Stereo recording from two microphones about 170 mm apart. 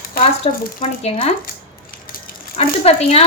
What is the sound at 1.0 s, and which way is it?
Speech, 35° left (ahead or behind).